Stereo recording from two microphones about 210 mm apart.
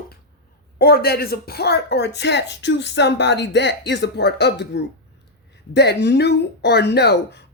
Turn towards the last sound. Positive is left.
turn(degrees=55)  # may be behind; listen again after turning